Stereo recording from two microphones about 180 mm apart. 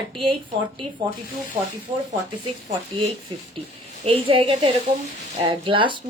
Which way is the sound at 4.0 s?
30° right (ahead or behind).